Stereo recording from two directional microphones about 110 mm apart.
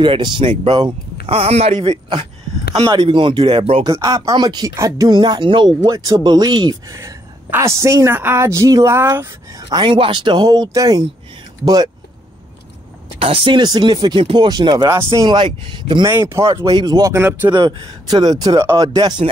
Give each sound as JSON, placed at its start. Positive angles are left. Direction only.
{"t": 0.0, "sound": "speech", "side_deg": -45}
{"t": 1.3, "sound": "speech", "side_deg": -70}
{"t": 2.9, "sound": "speech", "side_deg": -50}
{"t": 3.8, "sound": "speech", "side_deg": -35}
{"t": 4.6, "sound": "speech", "side_deg": -30}
{"t": 5.9, "sound": "a man's voice", "side_deg": -30}
{"t": 9.7, "sound": "speech", "side_deg": -45}
{"t": 13.2, "sound": "speech", "side_deg": -55}
{"t": 16.1, "sound": "a man's voice", "side_deg": -25}
{"t": 16.7, "sound": "speech", "side_deg": -40}
{"t": 17.1, "sound": "a man's voice", "side_deg": -20}
{"t": 17.6, "sound": "speech", "side_deg": -50}
{"t": 18.0, "sound": "speech", "side_deg": -40}